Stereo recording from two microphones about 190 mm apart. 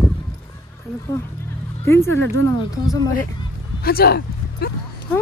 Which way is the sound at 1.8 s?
15° left (ahead or behind).